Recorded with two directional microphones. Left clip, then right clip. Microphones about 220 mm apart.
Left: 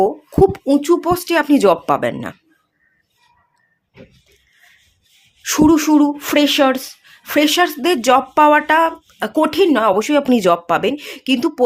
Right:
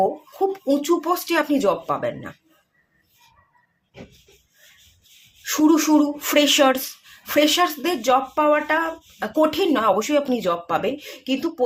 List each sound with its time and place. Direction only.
0.5 s speech: 30° left (ahead or behind)
5.4 s speech: 35° left (ahead or behind)